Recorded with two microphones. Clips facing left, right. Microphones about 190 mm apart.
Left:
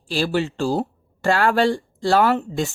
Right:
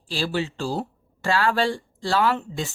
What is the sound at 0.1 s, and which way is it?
Speech, 50° left (ahead or behind).